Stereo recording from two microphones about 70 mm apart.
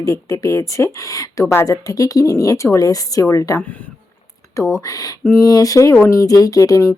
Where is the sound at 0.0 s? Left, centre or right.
Left.